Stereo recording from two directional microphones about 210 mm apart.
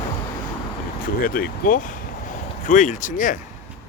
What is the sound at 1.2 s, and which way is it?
Speech, 45° left (ahead or behind).